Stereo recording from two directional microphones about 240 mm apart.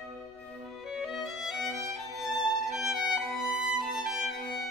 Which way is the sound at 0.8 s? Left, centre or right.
Centre.